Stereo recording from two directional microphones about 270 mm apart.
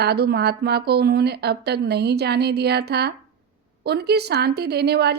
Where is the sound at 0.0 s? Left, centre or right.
Right.